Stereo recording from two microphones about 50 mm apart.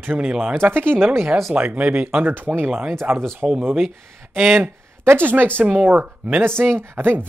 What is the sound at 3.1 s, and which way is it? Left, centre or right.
Speech, right.